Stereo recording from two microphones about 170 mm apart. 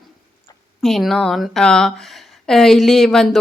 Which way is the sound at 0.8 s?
Centre (ahead or behind).